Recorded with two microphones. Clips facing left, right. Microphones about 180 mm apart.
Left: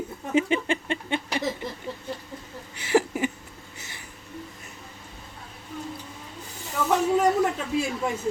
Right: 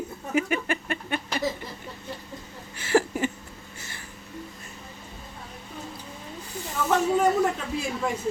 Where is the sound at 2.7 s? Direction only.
15° left (ahead or behind).